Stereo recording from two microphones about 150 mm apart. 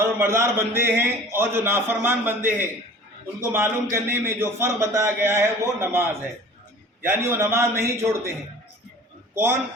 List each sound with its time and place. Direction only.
0.0 s a man's voice: 20° right (ahead or behind)
9.3 s a man's voice: 15° right (ahead or behind)